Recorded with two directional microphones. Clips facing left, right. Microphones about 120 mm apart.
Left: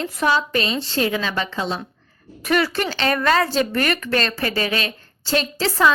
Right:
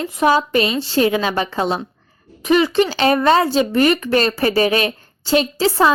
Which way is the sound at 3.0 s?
25° right (ahead or behind).